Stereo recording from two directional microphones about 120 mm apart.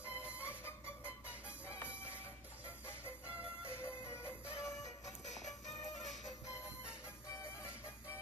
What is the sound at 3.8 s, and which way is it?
Music, 20° left (ahead or behind).